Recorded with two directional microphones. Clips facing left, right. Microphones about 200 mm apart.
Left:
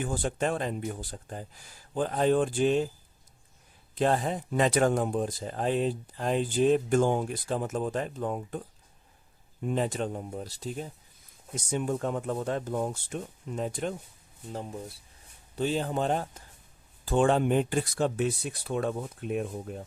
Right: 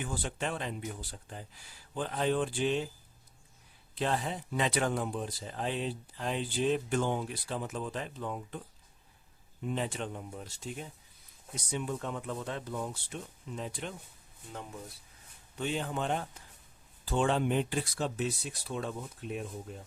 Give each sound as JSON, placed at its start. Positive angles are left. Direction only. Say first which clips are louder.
{"t": 0.0, "sound": "speech", "louder": "left 7 dB", "side_deg": 45}
{"t": 3.9, "sound": "speech", "louder": "left 6 dB", "side_deg": 45}
{"t": 14.5, "sound": "speech", "louder": "left 6 dB", "side_deg": 30}
{"t": 17.1, "sound": "speech", "louder": "left 5 dB", "side_deg": 50}